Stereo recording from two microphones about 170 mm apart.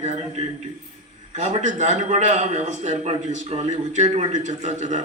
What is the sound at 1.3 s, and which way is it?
A man's voice, 40° right (ahead or behind).